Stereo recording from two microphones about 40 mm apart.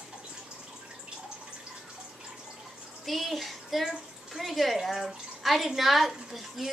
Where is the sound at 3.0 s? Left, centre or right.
Centre.